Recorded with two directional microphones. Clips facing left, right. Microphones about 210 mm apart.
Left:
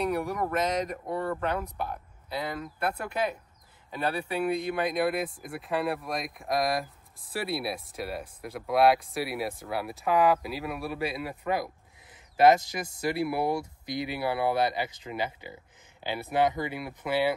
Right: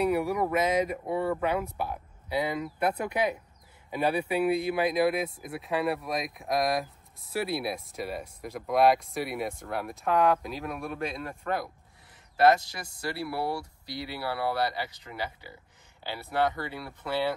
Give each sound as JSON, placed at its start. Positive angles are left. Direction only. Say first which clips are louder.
{"t": 0.0, "sound": "speech", "louder": "right 3 dB", "side_deg": -5}